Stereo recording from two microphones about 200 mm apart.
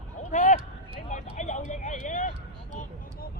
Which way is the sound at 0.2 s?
35° left (ahead or behind).